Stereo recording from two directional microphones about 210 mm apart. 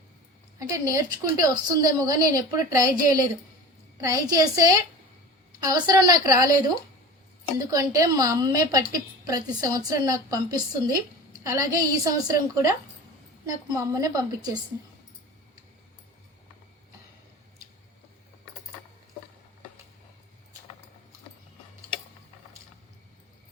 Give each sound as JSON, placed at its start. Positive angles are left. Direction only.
{"t": 0.6, "sound": "a woman's voice", "side_deg": -15}
{"t": 7.7, "sound": "a woman's voice", "side_deg": -15}
{"t": 13.7, "sound": "a woman's voice", "side_deg": -15}